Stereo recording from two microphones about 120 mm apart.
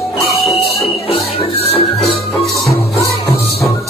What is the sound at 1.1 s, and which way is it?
Music, 60° left (ahead or behind).